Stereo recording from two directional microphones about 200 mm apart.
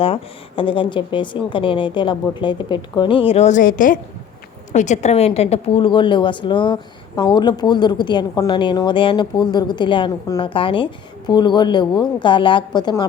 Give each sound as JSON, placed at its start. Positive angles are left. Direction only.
{"t": 0.0, "sound": "speech", "side_deg": 25}